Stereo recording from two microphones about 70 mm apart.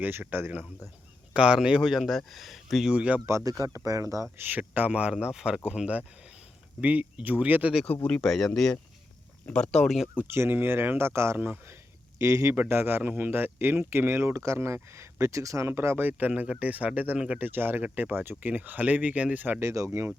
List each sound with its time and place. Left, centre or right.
0.0 s speech: right
1.3 s a man's voice: centre
2.9 s speech: centre
3.2 s speech: right
4.4 s speech: right; by 5.5 s centre
6.8 s speech: right
8.0 s speech: centre
10.2 s speech: right
11.3 s speech: right
12.2 s speech: right
12.5 s speech: right
15.6 s speech: right
16.0 s speech: right
19.5 s speech: right